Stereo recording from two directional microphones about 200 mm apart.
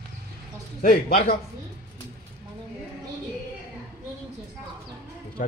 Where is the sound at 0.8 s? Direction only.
40° left (ahead or behind).